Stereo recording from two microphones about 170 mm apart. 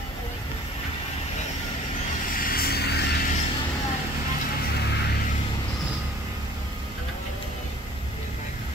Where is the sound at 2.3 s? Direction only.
60° left (ahead or behind); by 3.2 s 75° left (ahead or behind).